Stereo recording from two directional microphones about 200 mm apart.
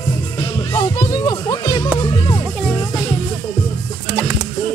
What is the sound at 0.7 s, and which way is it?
Music, 20° left (ahead or behind).